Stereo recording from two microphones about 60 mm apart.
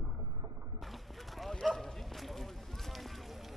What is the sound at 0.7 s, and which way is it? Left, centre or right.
Dog, centre.